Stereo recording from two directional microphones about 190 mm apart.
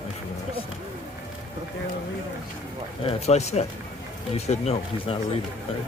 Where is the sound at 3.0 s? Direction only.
35° left (ahead or behind).